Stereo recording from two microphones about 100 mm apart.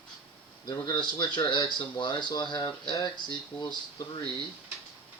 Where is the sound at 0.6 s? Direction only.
45° left (ahead or behind).